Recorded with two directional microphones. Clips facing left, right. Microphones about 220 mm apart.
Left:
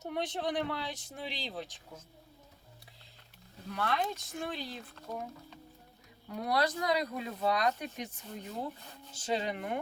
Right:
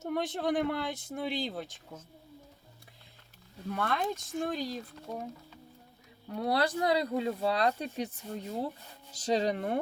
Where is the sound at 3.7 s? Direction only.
50° right (ahead or behind).